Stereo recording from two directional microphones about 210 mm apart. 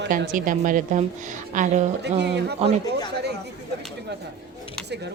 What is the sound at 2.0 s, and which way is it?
Speech, 55° right (ahead or behind).